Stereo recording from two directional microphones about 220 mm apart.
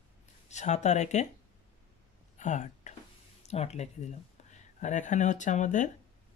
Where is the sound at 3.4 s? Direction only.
30° left (ahead or behind).